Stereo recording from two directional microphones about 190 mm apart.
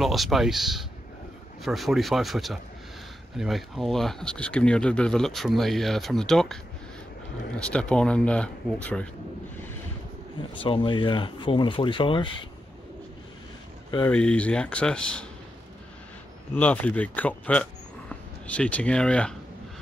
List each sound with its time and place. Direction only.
0.0 s speech: centre (ahead or behind)
10.6 s speech: 25° left (ahead or behind)
13.8 s speech: 20° left (ahead or behind)
14.1 s speech: 5° left (ahead or behind)
16.5 s speech: 10° left (ahead or behind)